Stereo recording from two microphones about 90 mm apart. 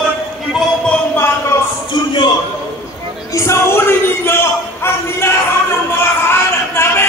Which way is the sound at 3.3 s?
30° left (ahead or behind).